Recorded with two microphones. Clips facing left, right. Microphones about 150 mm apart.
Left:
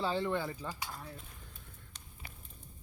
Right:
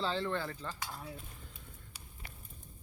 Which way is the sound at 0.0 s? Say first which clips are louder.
Left 2 dB; 10° left (ahead or behind).